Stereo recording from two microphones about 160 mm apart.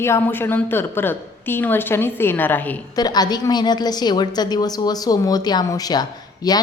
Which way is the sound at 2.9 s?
25° left (ahead or behind).